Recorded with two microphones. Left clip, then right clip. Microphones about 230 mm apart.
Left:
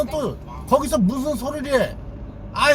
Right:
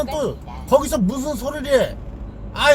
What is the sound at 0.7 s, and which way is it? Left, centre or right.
Speech, centre.